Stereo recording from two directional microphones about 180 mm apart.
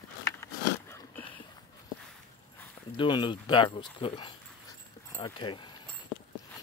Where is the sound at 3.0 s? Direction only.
25° left (ahead or behind).